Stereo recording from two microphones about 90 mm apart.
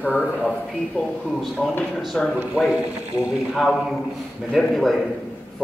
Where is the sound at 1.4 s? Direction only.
Centre (ahead or behind).